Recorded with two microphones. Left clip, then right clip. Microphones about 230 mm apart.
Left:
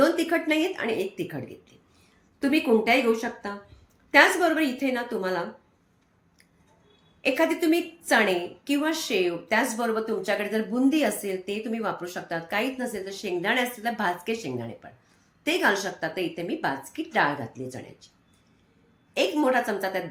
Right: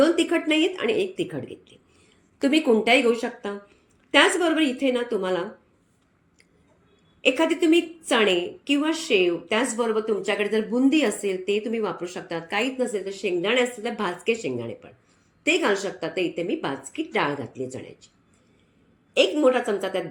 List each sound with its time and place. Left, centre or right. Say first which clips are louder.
0.2 s a woman's voice: right 3 dB; centre
2.4 s speech: right 2 dB; centre
4.1 s a woman's voice: even; centre
7.3 s a woman's voice: right 1 dB; centre
19.4 s a woman's voice: right 3 dB; centre